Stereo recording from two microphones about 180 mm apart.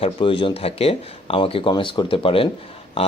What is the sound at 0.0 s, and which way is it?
Speech, 30° left (ahead or behind).